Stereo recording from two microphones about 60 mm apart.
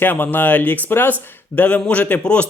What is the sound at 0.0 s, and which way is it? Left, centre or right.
Speech, left.